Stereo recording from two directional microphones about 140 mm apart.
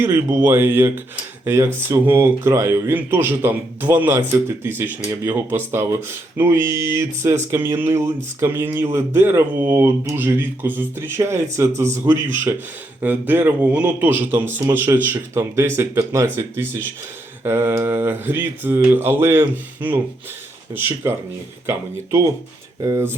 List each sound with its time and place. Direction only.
0.0 s speech: 20° right (ahead or behind)
22.8 s speech: 25° right (ahead or behind)